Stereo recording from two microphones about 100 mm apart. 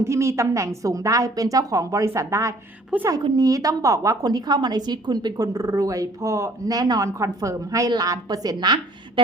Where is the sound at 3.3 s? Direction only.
35° right (ahead or behind).